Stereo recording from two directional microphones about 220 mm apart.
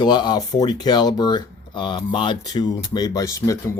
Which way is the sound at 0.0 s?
20° left (ahead or behind).